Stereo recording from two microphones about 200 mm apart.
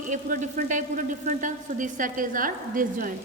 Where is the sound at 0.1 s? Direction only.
40° right (ahead or behind).